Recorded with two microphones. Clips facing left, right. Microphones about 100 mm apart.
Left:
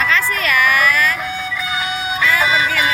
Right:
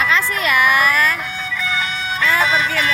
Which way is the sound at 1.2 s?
10° left (ahead or behind).